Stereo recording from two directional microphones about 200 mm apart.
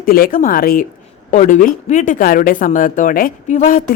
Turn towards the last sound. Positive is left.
turn(degrees=40)  # may be behind; listen again after turning